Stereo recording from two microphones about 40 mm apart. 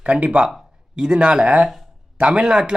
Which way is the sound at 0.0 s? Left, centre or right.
Right.